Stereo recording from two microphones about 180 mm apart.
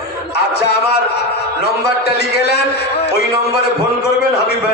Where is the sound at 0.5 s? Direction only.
65° left (ahead or behind).